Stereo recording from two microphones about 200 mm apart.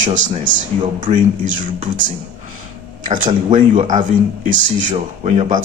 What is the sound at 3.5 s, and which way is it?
Speech, 40° right (ahead or behind).